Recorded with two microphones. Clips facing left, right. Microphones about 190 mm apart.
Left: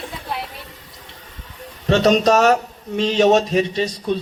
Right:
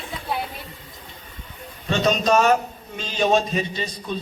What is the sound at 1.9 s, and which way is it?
A woman's voice, 85° left.